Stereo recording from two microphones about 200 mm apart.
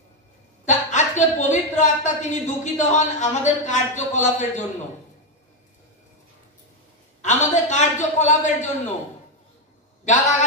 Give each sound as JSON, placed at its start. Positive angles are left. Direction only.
{"t": 0.7, "sound": "a man's voice", "side_deg": 35}
{"t": 7.2, "sound": "a man's voice", "side_deg": 35}
{"t": 10.0, "sound": "a man's voice", "side_deg": 40}